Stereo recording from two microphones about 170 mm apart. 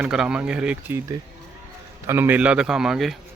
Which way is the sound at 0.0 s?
5° right (ahead or behind).